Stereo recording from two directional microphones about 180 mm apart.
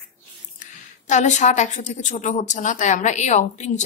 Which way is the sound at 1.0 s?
40° left (ahead or behind).